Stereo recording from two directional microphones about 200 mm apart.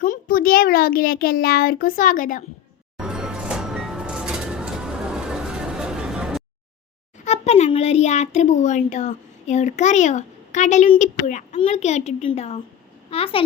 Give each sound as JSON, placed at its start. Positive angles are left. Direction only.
{"t": 0.0, "sound": "a child's voice", "side_deg": 45}
{"t": 3.0, "sound": "music", "side_deg": -5}
{"t": 7.3, "sound": "a child's voice", "side_deg": 35}